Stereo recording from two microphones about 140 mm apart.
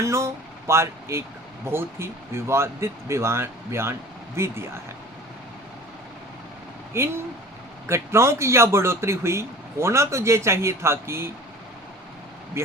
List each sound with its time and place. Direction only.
0.0 s speech: 20° right (ahead or behind)
6.9 s speech: 20° right (ahead or behind)
12.6 s speech: 20° right (ahead or behind)